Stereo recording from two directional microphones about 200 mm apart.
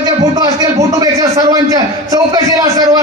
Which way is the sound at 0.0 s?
20° right (ahead or behind).